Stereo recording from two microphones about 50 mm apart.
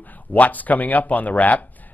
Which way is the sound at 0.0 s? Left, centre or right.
Left.